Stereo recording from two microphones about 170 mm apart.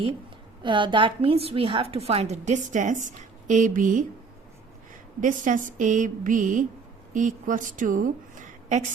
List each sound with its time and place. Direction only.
0.6 s a woman's voice: 30° right (ahead or behind); by 4.0 s 50° right (ahead or behind)
5.2 s a woman's voice: 50° right (ahead or behind)